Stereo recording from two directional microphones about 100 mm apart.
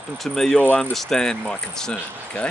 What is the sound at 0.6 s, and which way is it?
Speech, 15° left (ahead or behind).